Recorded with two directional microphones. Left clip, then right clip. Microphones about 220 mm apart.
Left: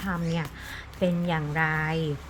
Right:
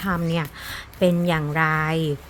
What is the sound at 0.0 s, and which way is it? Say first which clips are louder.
A woman's voice: right 6 dB; 50° right (ahead or behind).